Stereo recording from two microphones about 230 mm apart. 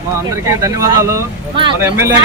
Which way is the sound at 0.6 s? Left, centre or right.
Centre.